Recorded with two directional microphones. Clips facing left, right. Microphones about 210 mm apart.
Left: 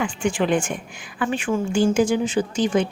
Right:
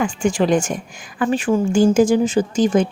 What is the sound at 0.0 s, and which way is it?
Speech, 45° right (ahead or behind).